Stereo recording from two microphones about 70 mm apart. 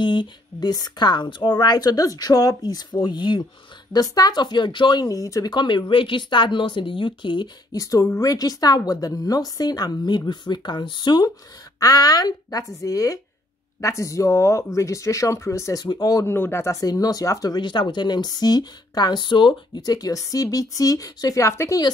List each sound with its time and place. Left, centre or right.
0.1 s speech: left
3.9 s speech: left
5.0 s speech: left
5.4 s speech: left
7.7 s speech: left
11.8 s speech: left
15.8 s speech: left
16.3 s speech: left
16.8 s speech: left
21.5 s speech: left